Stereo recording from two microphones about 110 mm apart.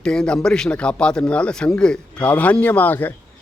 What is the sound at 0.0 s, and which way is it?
Speech, 5° left (ahead or behind).